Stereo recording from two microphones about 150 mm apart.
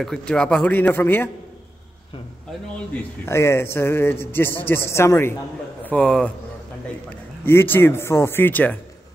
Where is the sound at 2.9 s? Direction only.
15° left (ahead or behind).